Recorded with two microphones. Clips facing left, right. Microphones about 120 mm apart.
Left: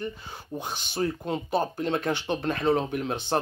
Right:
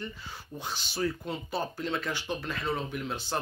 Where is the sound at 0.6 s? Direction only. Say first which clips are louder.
Left 3 dB; 50° left (ahead or behind).